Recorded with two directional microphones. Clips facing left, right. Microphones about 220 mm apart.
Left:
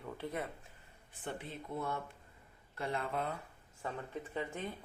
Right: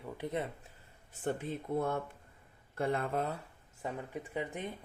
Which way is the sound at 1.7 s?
55° right (ahead or behind).